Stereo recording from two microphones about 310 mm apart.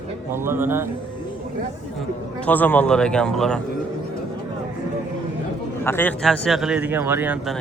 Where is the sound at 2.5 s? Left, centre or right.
Centre.